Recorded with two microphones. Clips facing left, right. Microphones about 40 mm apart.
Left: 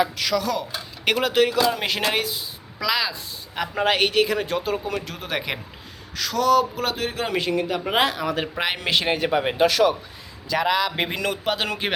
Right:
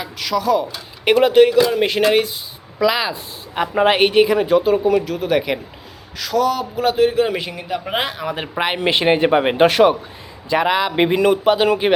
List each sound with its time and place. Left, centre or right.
0.0 s a man's voice: centre
2.8 s a man's voice: right
10.5 s a man's voice: right